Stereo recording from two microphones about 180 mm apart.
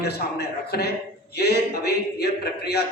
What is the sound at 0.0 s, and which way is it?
A man's voice, 65° left (ahead or behind).